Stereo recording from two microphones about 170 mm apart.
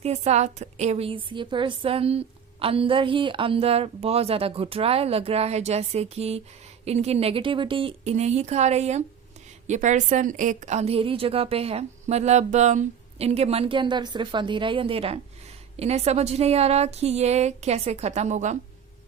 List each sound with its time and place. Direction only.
0.0 s a woman's voice: 40° right (ahead or behind)